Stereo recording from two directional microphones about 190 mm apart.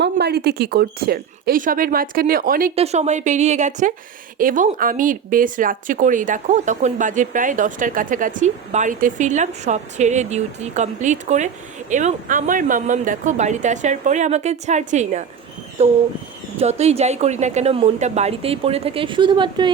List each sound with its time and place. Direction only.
0.0 s speech: 60° right (ahead or behind)
2.7 s speech: 35° right (ahead or behind)